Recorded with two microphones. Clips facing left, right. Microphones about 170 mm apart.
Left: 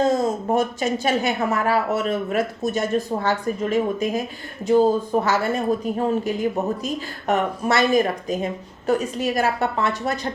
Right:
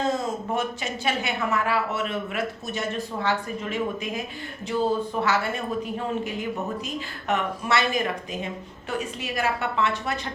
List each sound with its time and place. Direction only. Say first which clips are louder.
0.0 s a woman's voice: left 6 dB; 40° left (ahead or behind)